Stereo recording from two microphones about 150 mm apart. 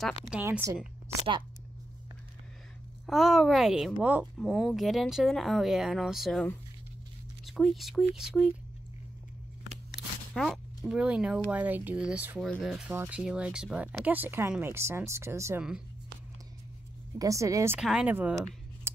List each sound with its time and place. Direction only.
0.0 s speech: centre (ahead or behind)
0.4 s speech: 15° right (ahead or behind)
3.1 s speech: centre (ahead or behind)
4.4 s speech: centre (ahead or behind)
7.4 s speech: centre (ahead or behind)
9.8 s speech: centre (ahead or behind)
12.4 s speech: centre (ahead or behind)
12.9 s speech: 15° right (ahead or behind)
17.2 s speech: 20° right (ahead or behind)
17.7 s speech: 5° right (ahead or behind)